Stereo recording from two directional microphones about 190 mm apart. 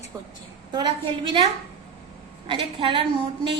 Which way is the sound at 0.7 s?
25° right (ahead or behind).